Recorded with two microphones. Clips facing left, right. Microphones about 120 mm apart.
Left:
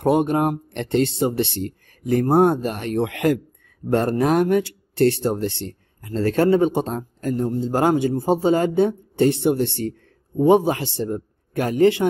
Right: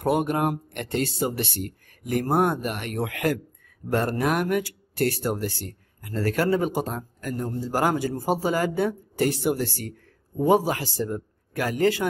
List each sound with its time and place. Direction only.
0.0 s a man's voice: 30° left (ahead or behind)